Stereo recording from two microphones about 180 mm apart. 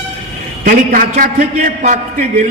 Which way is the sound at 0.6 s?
50° right (ahead or behind).